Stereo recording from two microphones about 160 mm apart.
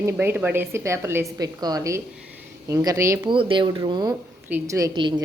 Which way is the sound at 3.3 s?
30° right (ahead or behind).